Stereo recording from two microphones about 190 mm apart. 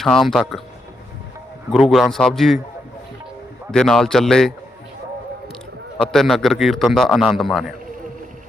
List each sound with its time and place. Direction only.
0.0 s a man's voice: centre (ahead or behind)
1.7 s a man's voice: centre (ahead or behind)
3.7 s a man's voice: 5° left (ahead or behind)
6.0 s a man's voice: centre (ahead or behind)